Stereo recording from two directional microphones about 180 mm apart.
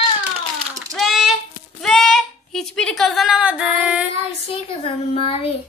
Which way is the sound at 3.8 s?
5° right (ahead or behind).